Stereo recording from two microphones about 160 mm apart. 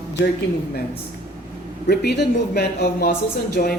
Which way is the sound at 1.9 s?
90° left.